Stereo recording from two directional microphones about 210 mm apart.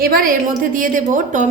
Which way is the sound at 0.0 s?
45° right (ahead or behind).